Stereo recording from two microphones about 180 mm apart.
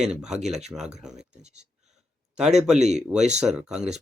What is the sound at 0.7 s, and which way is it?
Speech, centre (ahead or behind).